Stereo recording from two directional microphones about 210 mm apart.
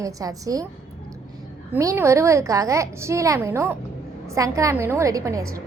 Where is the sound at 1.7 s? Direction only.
15° right (ahead or behind).